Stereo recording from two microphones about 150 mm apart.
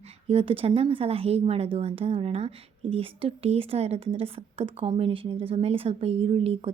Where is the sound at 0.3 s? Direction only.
40° right (ahead or behind).